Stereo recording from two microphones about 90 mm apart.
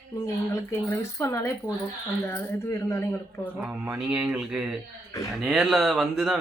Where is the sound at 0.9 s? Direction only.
30° left (ahead or behind).